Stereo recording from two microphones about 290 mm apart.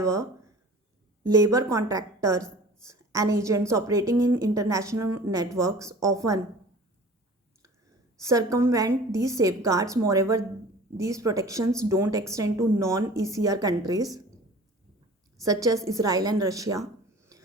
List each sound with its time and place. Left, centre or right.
0.0 s speech: centre
1.3 s a woman's voice: centre
8.2 s a woman's voice: centre
15.4 s a woman's voice: centre